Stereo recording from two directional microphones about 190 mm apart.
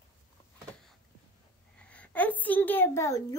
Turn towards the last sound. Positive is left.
turn(degrees=15)  # may be behind; listen again after turning